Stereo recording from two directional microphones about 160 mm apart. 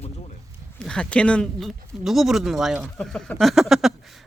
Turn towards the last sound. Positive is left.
turn(degrees=0)  # may be behind; listen again after turning